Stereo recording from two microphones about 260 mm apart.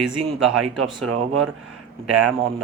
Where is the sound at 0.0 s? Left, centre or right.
Centre.